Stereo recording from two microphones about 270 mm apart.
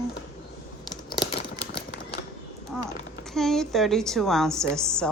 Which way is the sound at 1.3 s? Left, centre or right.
Left.